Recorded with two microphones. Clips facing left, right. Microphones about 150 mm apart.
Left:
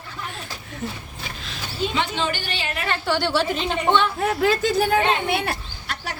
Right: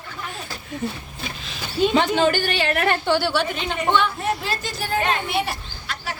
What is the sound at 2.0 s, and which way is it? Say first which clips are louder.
Speech: right 7 dB; 45° right (ahead or behind).